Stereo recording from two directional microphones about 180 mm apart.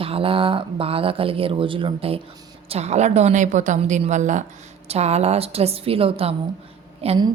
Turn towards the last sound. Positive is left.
turn(degrees=-35)  # may be behind; listen again after turning